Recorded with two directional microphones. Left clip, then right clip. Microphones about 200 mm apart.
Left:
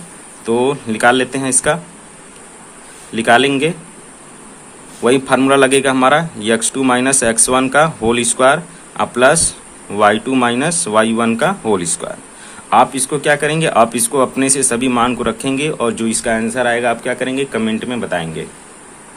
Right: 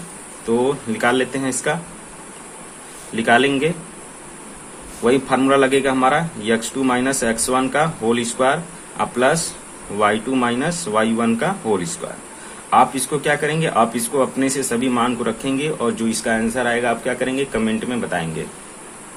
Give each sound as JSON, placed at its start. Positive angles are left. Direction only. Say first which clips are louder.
{"t": 0.4, "sound": "speech", "louder": "left 4 dB", "side_deg": 35}
{"t": 3.2, "sound": "speech", "louder": "left 4 dB", "side_deg": 35}
{"t": 5.0, "sound": "speech", "louder": "left 4 dB", "side_deg": 35}